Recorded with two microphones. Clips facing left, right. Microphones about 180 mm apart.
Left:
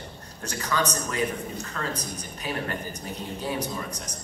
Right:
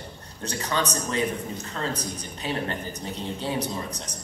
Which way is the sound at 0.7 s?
25° right (ahead or behind).